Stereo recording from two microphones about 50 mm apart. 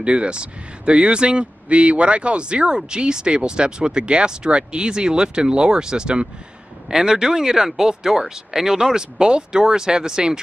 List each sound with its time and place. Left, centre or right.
0.0 s speech: right